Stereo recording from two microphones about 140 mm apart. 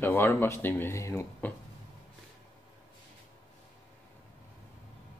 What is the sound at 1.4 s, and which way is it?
Speech, 10° left (ahead or behind).